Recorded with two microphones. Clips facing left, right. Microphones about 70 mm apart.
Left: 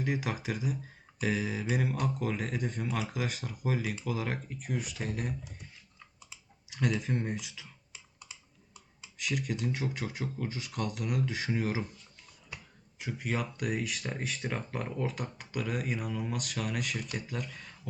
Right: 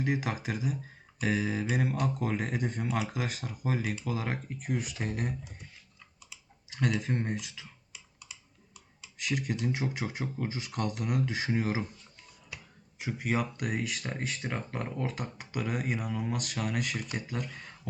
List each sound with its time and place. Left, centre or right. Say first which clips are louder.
0.0 s speech: right 2 dB; centre
6.7 s speech: right 1 dB; centre
7.9 s computer keyboard: left 2 dB; left
9.1 s speech: right 1 dB; centre
13.0 s speech: right 3 dB; centre